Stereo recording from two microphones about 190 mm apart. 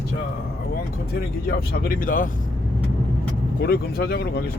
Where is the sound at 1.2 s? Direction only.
55° left (ahead or behind).